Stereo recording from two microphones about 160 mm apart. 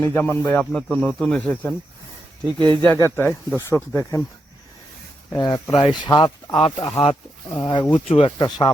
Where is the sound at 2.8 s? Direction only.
15° left (ahead or behind).